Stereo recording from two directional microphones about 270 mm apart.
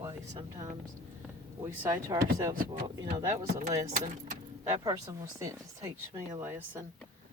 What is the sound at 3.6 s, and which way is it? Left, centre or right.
Speech, right.